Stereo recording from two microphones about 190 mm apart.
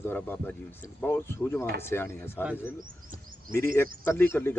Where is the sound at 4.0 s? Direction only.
10° left (ahead or behind).